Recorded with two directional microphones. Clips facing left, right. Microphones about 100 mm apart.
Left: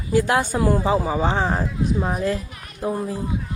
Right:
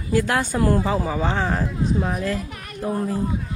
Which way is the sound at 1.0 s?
20° left (ahead or behind).